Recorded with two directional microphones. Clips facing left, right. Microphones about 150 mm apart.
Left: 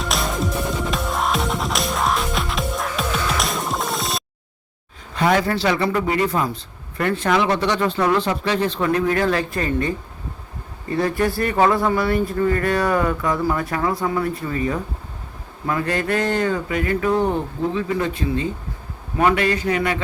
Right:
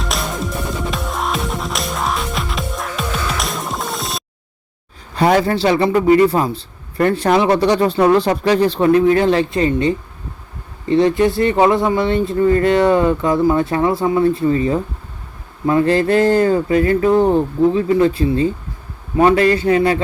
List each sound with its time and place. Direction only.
0.0 s music: centre (ahead or behind)
5.1 s a man's voice: 35° right (ahead or behind)